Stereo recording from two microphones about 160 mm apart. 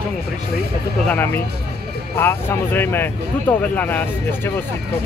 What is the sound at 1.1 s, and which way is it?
Speech, 15° left (ahead or behind).